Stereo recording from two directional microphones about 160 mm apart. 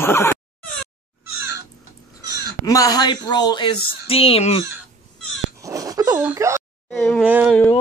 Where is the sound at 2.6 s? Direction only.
20° left (ahead or behind); by 4.6 s 40° left (ahead or behind).